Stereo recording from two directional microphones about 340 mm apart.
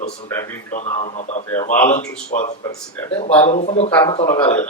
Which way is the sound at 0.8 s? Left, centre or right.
Centre.